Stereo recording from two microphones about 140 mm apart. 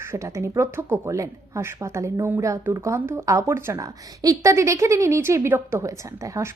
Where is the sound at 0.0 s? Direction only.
20° right (ahead or behind).